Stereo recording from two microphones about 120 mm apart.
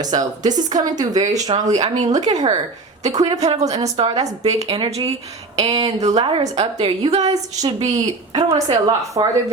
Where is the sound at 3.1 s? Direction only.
35° right (ahead or behind).